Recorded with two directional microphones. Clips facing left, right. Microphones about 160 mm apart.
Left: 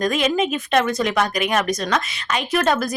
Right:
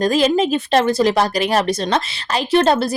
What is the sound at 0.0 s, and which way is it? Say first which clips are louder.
Speech: right 4 dB; 30° right (ahead or behind).